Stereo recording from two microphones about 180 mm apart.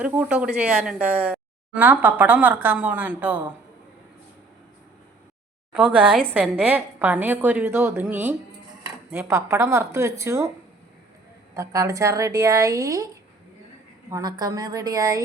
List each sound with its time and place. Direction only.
0.0 s a woman's voice: 5° right (ahead or behind)
5.7 s a woman's voice: 5° right (ahead or behind)
11.5 s a woman's voice: 15° right (ahead or behind)
14.1 s a woman's voice: 20° right (ahead or behind)